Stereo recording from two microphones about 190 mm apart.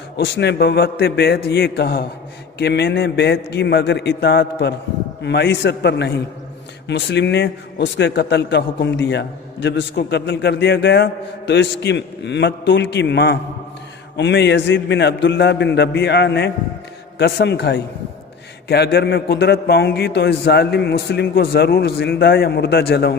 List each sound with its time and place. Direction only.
0.3 s a man's voice: 60° left (ahead or behind)